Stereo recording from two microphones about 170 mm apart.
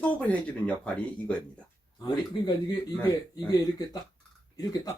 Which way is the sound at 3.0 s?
20° left (ahead or behind).